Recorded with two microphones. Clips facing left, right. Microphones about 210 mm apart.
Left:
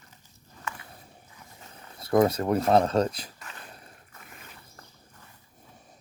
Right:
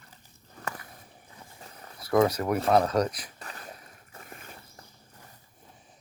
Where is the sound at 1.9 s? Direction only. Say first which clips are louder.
Left 1 dB; 25° left (ahead or behind).